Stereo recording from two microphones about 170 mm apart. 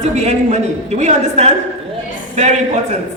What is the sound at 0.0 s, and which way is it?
A woman's voice, 40° right (ahead or behind).